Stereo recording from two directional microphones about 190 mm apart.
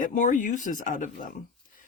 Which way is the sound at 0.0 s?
40° left (ahead or behind).